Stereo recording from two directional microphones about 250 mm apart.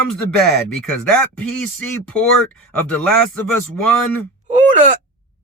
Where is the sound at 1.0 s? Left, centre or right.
Centre.